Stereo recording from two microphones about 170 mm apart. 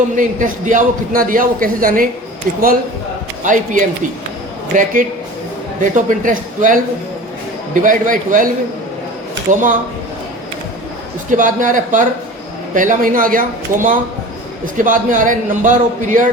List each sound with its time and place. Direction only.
0.2 s a man's voice: 50° right (ahead or behind)
3.4 s a man's voice: 50° right (ahead or behind)
9.5 s a man's voice: 50° right (ahead or behind)
11.3 s a man's voice: 50° right (ahead or behind)
13.7 s speech: 15° right (ahead or behind)
14.8 s a man's voice: 50° right (ahead or behind)